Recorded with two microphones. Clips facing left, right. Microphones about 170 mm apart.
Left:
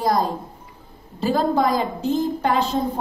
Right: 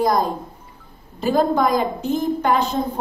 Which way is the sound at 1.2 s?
35° left (ahead or behind).